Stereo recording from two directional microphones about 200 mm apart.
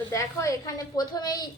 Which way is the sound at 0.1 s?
15° left (ahead or behind).